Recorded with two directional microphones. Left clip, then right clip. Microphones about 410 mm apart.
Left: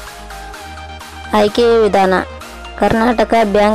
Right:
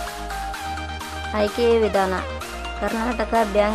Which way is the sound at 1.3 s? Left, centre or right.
Centre.